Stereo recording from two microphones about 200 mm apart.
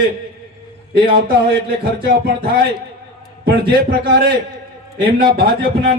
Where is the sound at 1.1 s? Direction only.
45° right (ahead or behind).